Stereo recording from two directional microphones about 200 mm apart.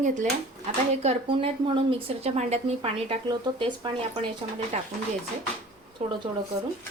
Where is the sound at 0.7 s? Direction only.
30° right (ahead or behind).